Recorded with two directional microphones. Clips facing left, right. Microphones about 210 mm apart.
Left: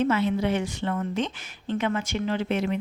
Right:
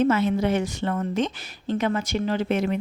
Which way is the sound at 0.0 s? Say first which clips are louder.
Right 3 dB; 45° right (ahead or behind).